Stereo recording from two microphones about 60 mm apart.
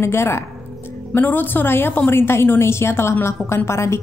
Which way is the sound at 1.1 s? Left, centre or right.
Left.